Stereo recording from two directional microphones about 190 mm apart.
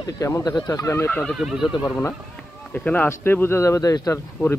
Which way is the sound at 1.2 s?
Centre (ahead or behind).